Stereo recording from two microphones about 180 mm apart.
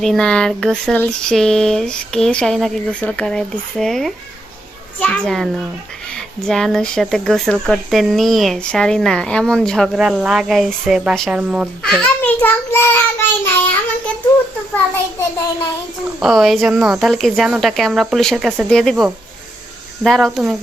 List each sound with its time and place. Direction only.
0.0 s speech: 5° left (ahead or behind)
16.2 s speech: centre (ahead or behind)